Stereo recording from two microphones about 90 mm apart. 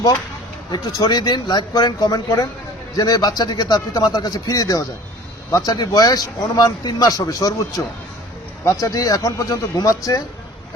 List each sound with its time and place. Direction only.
0.7 s a man's voice: 50° left (ahead or behind)
8.6 s speech: 40° left (ahead or behind)